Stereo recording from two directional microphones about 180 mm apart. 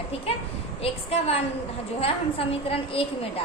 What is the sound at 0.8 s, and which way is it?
A woman's voice, 35° left (ahead or behind).